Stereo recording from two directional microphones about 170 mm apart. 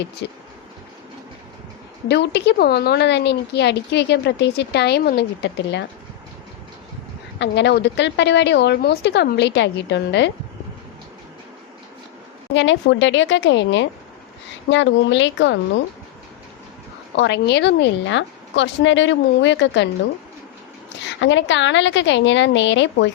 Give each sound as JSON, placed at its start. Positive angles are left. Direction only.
{"t": 0.2, "sound": "a woman's voice", "side_deg": 90}
{"t": 2.0, "sound": "speech", "side_deg": 80}
{"t": 7.3, "sound": "a woman's voice", "side_deg": 90}
{"t": 12.5, "sound": "a woman's voice", "side_deg": 90}
{"t": 17.2, "sound": "a woman's voice", "side_deg": 90}
{"t": 21.0, "sound": "a woman's voice", "side_deg": 90}